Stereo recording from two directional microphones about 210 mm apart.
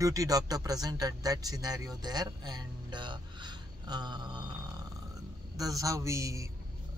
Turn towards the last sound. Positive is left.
turn(degrees=-15)  # may be behind; listen again after turning